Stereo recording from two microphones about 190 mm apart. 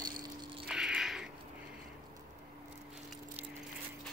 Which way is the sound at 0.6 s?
5° right (ahead or behind).